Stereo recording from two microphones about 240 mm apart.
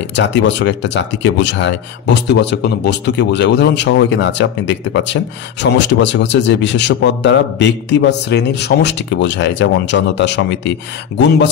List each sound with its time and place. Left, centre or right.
0.1 s speech: left